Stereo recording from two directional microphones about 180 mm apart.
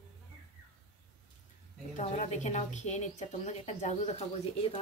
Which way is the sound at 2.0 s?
40° left (ahead or behind).